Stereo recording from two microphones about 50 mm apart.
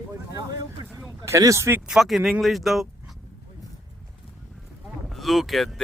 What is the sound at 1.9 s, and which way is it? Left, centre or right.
Speech, centre.